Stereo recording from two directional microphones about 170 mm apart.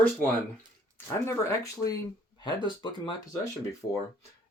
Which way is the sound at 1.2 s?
15° left (ahead or behind).